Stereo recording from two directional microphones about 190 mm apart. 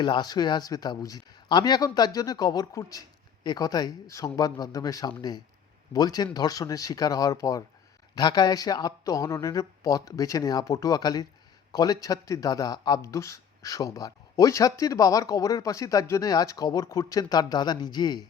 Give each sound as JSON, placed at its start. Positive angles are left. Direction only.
{"t": 0.0, "sound": "speech", "side_deg": 20}